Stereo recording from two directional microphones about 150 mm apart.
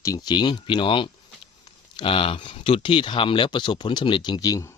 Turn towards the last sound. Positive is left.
turn(degrees=25)  # may be behind; listen again after turning